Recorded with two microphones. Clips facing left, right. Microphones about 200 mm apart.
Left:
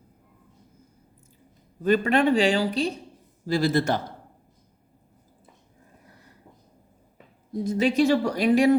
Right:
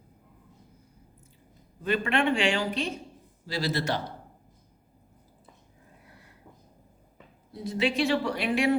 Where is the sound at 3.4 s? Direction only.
50° left (ahead or behind).